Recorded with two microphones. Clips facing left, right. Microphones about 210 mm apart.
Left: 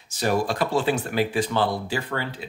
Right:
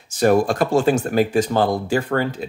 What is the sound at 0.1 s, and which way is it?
Speech, 50° right (ahead or behind).